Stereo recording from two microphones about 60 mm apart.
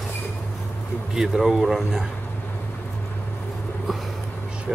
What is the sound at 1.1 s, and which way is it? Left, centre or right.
Speech, centre.